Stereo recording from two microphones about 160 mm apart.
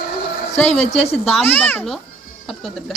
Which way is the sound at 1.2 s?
10° left (ahead or behind).